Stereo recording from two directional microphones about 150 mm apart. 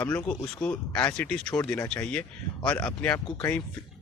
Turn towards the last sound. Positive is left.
turn(degrees=25)  # may be behind; listen again after turning